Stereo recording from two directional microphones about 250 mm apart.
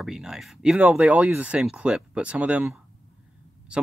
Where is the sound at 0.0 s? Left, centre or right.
Centre.